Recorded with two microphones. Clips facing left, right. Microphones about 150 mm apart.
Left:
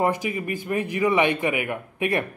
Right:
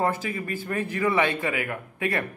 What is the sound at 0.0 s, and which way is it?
A man's voice, 15° left (ahead or behind).